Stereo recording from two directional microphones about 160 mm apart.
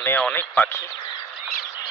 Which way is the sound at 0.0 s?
10° left (ahead or behind).